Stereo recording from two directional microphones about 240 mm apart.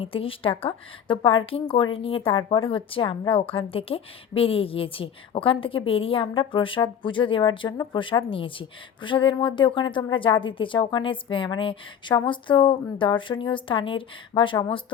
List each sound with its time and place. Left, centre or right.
0.0 s speech: left